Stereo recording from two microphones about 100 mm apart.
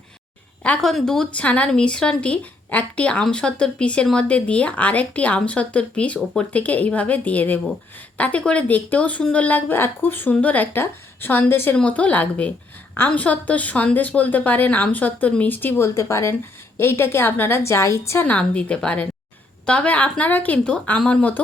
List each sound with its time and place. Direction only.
0.6 s a woman's voice: 10° left (ahead or behind); by 18.3 s 25° left (ahead or behind)
18.3 s speech: 10° left (ahead or behind)